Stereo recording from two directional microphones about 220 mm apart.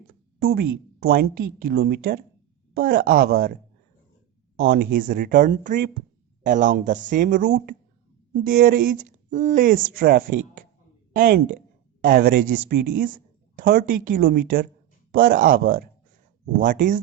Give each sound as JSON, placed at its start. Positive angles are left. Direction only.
{"t": 0.1, "sound": "speech", "side_deg": -45}
{"t": 4.7, "sound": "speech", "side_deg": -40}